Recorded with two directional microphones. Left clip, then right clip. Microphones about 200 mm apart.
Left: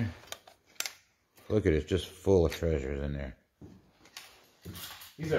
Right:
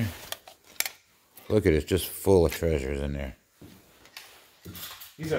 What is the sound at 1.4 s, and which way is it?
Speech, 30° right (ahead or behind).